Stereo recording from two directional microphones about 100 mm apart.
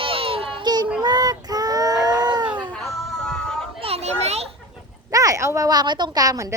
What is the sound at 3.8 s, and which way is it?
Children playing, 85° right.